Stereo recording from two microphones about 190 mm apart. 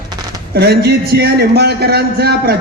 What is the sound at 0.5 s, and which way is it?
A man's voice, 60° right (ahead or behind).